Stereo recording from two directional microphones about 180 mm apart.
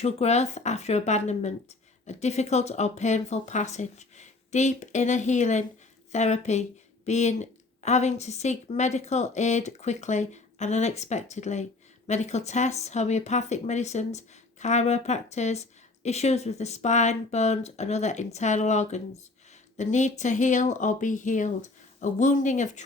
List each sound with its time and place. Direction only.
0.0 s a woman's voice: 35° left (ahead or behind)